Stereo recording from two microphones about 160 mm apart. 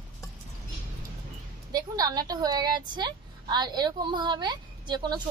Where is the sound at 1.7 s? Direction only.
25° right (ahead or behind).